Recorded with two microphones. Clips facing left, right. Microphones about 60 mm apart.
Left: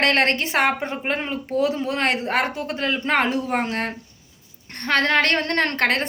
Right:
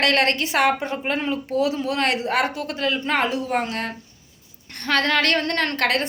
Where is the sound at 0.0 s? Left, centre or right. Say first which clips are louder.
Even; left.